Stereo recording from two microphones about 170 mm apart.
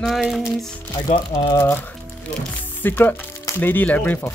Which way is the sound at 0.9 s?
20° left (ahead or behind).